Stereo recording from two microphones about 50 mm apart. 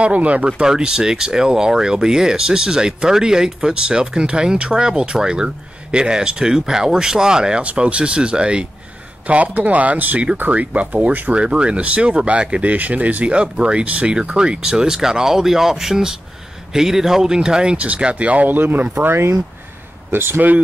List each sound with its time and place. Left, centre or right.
0.0 s speech: right
0.5 s speech: centre; by 11.3 s right
11.3 s speech: right
19.0 s speech: right